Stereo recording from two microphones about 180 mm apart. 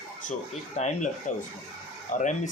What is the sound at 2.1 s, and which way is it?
Speech, 45° left (ahead or behind).